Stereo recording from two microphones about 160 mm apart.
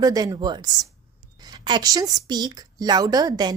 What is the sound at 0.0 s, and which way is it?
A woman's voice, 20° right (ahead or behind).